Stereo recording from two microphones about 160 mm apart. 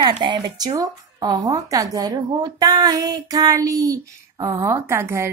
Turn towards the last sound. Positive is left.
turn(degrees=-15)  # may be behind; listen again after turning